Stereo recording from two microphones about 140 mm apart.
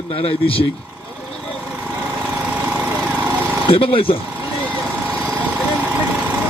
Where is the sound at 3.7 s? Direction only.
40° left (ahead or behind).